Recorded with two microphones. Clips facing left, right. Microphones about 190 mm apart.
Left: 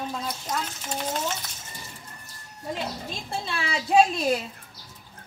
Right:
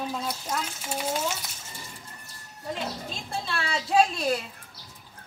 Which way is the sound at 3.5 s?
10° left (ahead or behind).